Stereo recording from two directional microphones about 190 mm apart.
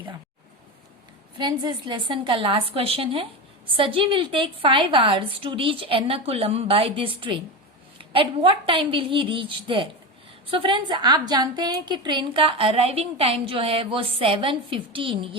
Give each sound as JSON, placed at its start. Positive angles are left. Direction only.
{"t": 1.4, "sound": "a woman's voice", "side_deg": -25}